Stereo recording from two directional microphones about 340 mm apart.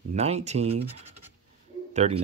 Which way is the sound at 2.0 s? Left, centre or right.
Centre.